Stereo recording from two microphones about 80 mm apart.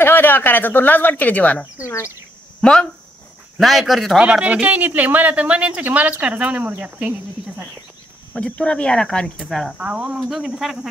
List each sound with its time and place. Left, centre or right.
0.0 s speech: left
1.8 s speech: left
2.6 s speech: centre
4.2 s speech: centre
8.4 s speech: centre
9.8 s speech: centre